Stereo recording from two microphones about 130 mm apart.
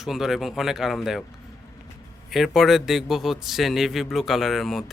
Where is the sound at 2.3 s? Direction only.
Centre (ahead or behind).